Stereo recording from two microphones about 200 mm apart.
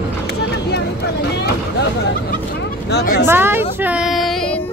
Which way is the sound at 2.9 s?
45° left (ahead or behind).